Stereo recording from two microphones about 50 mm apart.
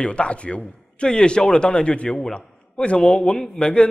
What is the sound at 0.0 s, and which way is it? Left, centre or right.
A man's voice, left.